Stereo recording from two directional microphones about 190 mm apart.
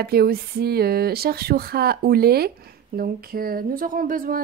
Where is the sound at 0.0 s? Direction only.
55° right (ahead or behind).